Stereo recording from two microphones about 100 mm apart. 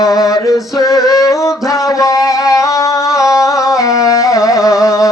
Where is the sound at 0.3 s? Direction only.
35° left (ahead or behind).